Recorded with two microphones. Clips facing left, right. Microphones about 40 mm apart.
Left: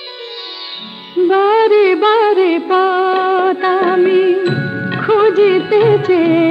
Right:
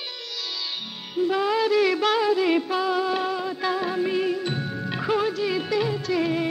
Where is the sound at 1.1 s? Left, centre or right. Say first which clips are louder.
Left 12 dB; left.